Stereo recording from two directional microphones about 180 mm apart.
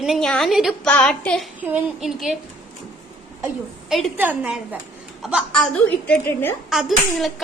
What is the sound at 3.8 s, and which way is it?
A woman's voice, centre (ahead or behind).